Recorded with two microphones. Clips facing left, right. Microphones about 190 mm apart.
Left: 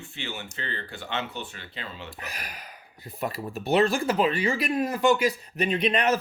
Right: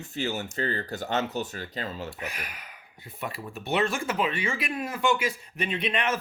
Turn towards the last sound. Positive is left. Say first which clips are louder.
# left 5 dB
turn(degrees=40)  # may be behind; listen again after turning